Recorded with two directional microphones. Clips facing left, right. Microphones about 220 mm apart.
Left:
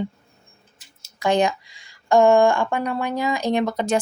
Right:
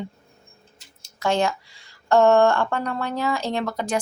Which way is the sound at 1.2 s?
15° left (ahead or behind).